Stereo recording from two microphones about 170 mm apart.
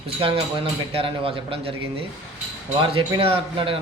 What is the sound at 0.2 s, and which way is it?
A man's voice, 30° right (ahead or behind).